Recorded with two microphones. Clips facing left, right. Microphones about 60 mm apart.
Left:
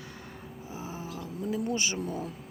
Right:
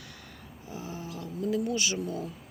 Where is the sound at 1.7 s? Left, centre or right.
Left.